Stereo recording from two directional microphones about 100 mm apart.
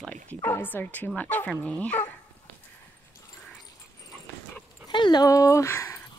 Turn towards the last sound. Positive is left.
turn(degrees=30)  # may be behind; listen again after turning